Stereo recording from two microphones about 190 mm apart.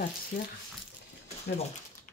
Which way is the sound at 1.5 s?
50° left (ahead or behind).